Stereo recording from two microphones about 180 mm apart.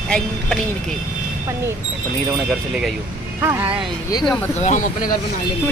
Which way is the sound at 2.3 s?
Centre (ahead or behind).